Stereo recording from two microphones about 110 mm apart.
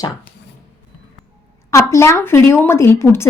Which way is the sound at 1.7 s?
25° left (ahead or behind).